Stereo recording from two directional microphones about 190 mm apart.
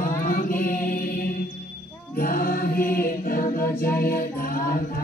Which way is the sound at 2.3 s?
50° left (ahead or behind).